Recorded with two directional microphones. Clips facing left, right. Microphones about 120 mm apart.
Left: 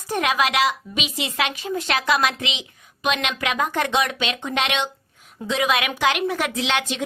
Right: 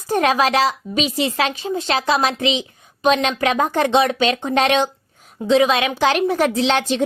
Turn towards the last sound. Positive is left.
turn(degrees=-35)  # may be behind; listen again after turning